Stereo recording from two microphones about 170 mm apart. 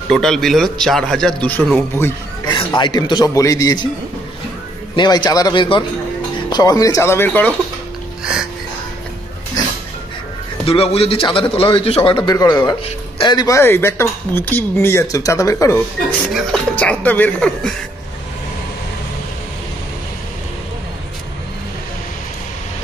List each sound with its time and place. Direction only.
0.1 s speech: 5° left (ahead or behind)
2.4 s a man's voice: 25° left (ahead or behind)
4.9 s a man's voice: 25° left (ahead or behind); by 7.5 s 10° left (ahead or behind)
8.2 s music: 5° right (ahead or behind)
10.6 s a man's voice: 35° left (ahead or behind); by 15.8 s 20° left (ahead or behind)
16.3 s speech: 5° left (ahead or behind)